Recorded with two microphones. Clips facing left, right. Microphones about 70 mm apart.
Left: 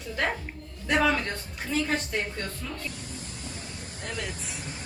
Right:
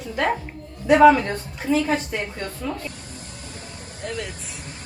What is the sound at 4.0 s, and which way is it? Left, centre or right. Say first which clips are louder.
Speech: right 5 dB; centre.